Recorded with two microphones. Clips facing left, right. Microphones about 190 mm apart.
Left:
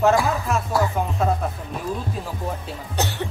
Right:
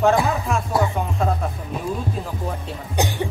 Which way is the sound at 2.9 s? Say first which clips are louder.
Right 3 dB; 15° right (ahead or behind).